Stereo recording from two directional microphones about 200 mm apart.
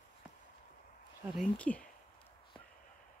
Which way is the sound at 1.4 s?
5° left (ahead or behind).